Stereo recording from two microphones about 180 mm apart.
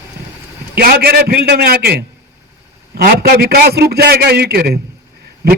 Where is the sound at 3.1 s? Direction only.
60° right (ahead or behind).